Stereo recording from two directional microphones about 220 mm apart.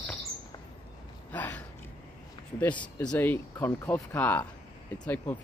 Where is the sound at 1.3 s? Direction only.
5° left (ahead or behind).